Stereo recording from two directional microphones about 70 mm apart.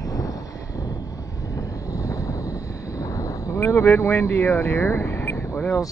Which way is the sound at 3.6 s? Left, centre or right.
Left.